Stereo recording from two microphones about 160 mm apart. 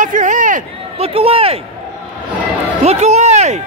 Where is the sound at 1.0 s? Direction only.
40° right (ahead or behind).